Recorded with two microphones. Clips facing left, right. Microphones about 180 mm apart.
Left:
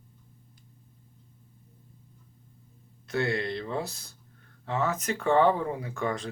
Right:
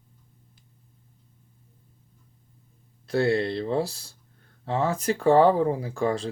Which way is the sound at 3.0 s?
35° right (ahead or behind).